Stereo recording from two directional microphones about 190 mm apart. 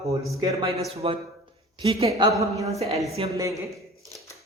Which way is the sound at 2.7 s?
35° right (ahead or behind).